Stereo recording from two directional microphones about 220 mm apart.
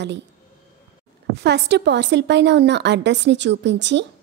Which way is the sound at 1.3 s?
50° right (ahead or behind).